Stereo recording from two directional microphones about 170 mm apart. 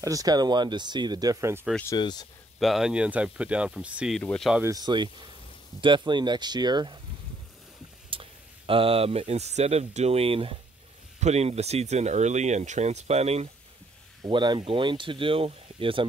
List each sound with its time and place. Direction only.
0.0 s speech: 20° right (ahead or behind)
1.9 s speech: 25° left (ahead or behind)
2.6 s speech: centre (ahead or behind)
4.2 s speech: 5° left (ahead or behind)
4.6 s speech: 20° right (ahead or behind)
8.1 s speech: 30° right (ahead or behind)
14.2 s speech: 25° right (ahead or behind)